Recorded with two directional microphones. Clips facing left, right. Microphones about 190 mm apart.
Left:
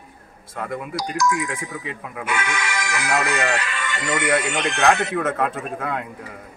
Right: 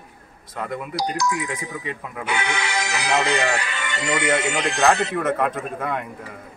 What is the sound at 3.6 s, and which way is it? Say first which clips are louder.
Speech: even; 25° right (ahead or behind).